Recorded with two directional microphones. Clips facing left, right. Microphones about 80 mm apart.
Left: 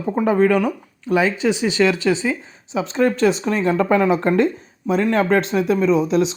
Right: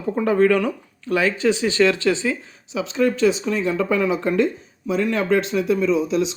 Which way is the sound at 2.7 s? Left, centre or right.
Left.